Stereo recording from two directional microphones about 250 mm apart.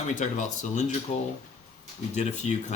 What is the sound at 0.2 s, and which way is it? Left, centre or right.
Speech, left.